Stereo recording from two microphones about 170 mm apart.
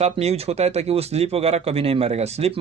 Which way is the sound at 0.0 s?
40° right (ahead or behind).